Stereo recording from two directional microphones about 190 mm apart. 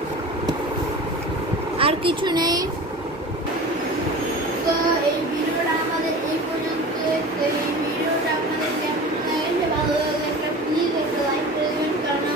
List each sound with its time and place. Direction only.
1.8 s a woman's voice: 30° right (ahead or behind)